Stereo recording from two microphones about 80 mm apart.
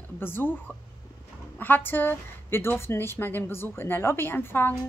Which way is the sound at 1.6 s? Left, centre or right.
Left.